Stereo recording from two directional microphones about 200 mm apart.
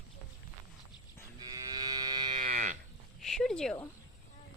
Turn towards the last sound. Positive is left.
turn(degrees=0)  # may be behind; listen again after turning